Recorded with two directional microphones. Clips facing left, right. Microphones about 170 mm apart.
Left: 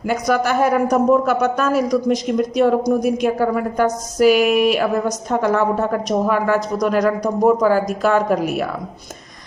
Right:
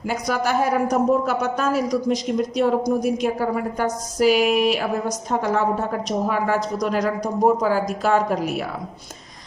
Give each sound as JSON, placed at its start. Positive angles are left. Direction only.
{"t": 0.1, "sound": "speech", "side_deg": 55}
{"t": 0.9, "sound": "speech", "side_deg": 65}